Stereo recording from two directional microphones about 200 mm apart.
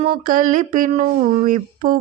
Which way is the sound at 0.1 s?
40° right (ahead or behind).